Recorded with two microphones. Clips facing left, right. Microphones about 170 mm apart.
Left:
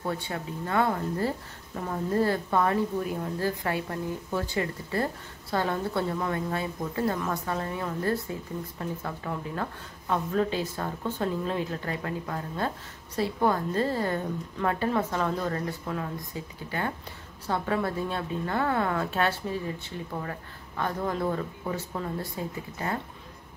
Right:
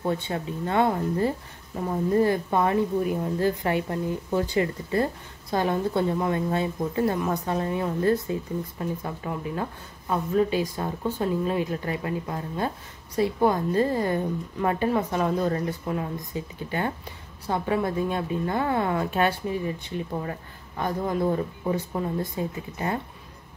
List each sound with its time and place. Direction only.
0.0 s a woman's voice: 25° right (ahead or behind)